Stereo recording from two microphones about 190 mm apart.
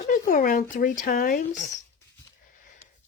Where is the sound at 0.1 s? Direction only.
45° left (ahead or behind).